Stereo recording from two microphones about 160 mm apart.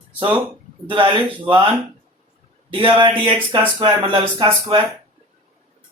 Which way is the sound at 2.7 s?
35° right (ahead or behind).